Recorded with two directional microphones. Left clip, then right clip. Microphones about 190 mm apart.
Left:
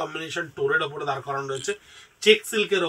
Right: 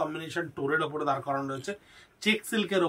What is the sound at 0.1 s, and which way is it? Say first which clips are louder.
Speech: left 4 dB; 20° right (ahead or behind).